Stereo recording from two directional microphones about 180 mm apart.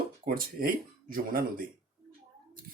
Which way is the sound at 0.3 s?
55° right (ahead or behind).